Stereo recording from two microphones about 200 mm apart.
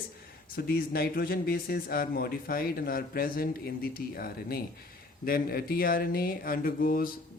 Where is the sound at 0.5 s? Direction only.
50° left (ahead or behind).